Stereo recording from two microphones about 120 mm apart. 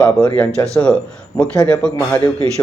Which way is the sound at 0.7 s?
5° left (ahead or behind).